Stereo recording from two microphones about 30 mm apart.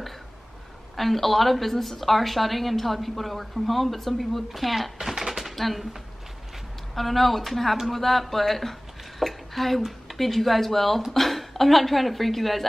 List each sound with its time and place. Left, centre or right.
0.9 s a woman's voice: centre
5.0 s chopping: centre
5.6 s a woman's voice: centre
7.0 s a woman's voice: centre